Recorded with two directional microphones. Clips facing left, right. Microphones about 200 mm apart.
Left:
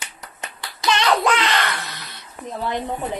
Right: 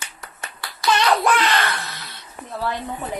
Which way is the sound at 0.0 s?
20° left (ahead or behind).